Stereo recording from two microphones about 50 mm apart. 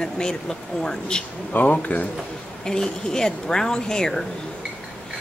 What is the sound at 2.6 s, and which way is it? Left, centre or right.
Speech, centre.